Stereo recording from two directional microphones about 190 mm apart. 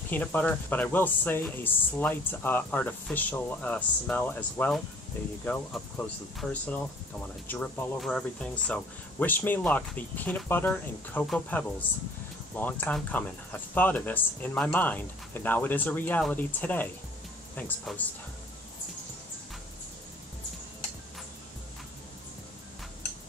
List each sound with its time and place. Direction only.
0.1 s speech: 10° left (ahead or behind)